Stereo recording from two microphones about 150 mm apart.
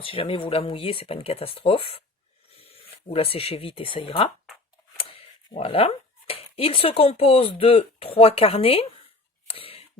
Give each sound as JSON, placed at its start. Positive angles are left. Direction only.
{"t": 0.0, "sound": "speech", "side_deg": 35}
{"t": 5.5, "sound": "speech", "side_deg": 40}
{"t": 9.5, "sound": "a sound", "side_deg": 40}